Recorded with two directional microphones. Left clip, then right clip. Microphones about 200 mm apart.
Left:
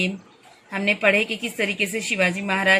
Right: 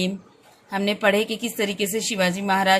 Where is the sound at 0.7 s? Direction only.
50° right (ahead or behind).